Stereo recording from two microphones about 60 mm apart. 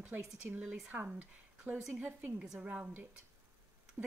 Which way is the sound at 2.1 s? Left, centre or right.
Right.